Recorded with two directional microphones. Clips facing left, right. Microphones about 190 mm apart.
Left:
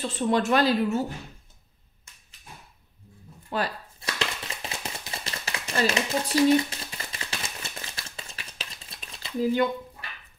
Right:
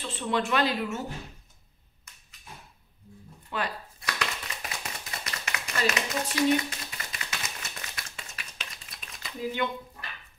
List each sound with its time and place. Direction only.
0.0 s speech: 40° left (ahead or behind)
2.1 s dog: 30° left (ahead or behind)
3.4 s a sound: 35° left (ahead or behind)